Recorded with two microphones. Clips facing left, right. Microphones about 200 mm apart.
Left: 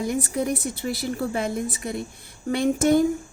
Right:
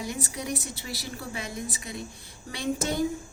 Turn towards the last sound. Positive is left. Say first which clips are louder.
# left 10 dB
turn(degrees=55)  # may be behind; listen again after turning